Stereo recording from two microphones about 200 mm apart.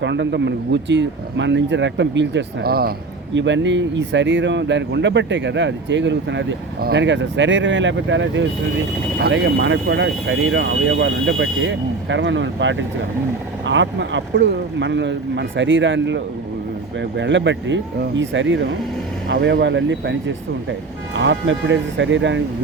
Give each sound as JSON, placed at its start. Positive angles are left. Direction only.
{"t": 0.0, "sound": "speech", "side_deg": -60}
{"t": 3.3, "sound": "speech", "side_deg": -65}